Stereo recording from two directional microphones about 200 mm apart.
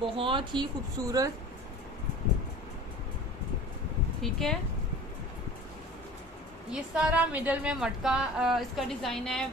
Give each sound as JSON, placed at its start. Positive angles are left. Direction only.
{"t": 0.0, "sound": "speech", "side_deg": -25}
{"t": 4.2, "sound": "a woman's voice", "side_deg": 0}
{"t": 6.7, "sound": "a woman's voice", "side_deg": -5}